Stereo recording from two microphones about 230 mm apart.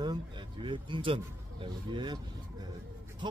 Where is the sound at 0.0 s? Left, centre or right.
Centre.